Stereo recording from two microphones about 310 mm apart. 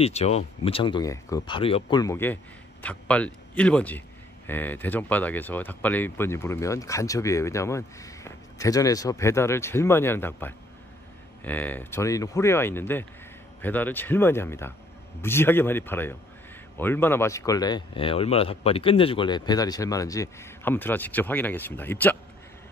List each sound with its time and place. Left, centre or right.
0.0 s a man's voice: left